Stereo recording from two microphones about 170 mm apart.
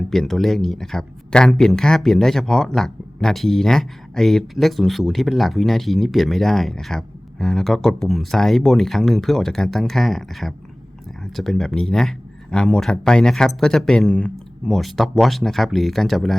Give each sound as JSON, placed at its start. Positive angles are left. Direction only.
{"t": 0.1, "sound": "speech", "side_deg": 0}